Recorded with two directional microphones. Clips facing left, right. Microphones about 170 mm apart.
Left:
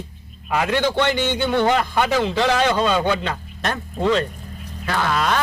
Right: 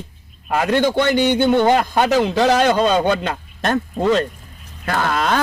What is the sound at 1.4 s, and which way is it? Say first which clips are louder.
Speech: right 2 dB; 20° right (ahead or behind).